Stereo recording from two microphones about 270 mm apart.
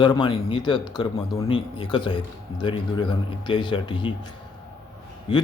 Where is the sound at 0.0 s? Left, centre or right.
Centre.